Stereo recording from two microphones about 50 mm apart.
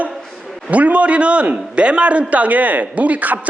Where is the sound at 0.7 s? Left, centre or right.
Right.